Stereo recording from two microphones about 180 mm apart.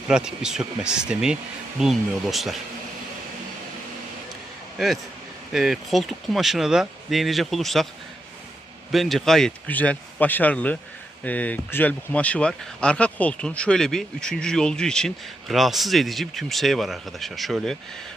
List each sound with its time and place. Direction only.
0.1 s speech: 5° right (ahead or behind)
5.5 s speech: centre (ahead or behind)
8.9 s speech: centre (ahead or behind)